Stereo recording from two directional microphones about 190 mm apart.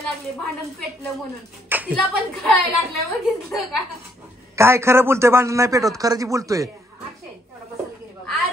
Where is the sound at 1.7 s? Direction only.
5° right (ahead or behind).